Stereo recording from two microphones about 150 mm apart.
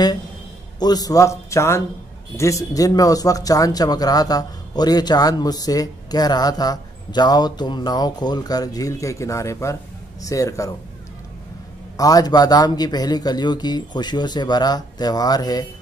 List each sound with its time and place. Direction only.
0.7 s speech: 25° left (ahead or behind)
12.0 s speech: 25° left (ahead or behind)